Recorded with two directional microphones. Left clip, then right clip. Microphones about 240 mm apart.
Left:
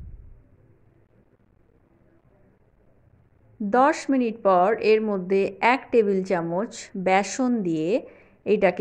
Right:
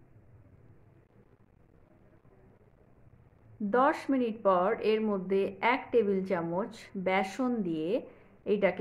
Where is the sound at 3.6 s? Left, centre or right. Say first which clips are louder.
Left 7 dB; left.